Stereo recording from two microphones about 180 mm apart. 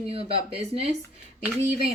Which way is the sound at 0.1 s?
30° right (ahead or behind).